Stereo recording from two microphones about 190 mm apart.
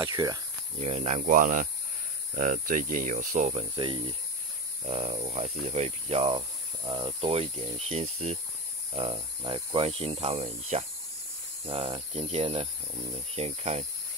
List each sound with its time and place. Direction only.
0.0 s speech: 20° right (ahead or behind)
0.7 s speech: 35° right (ahead or behind)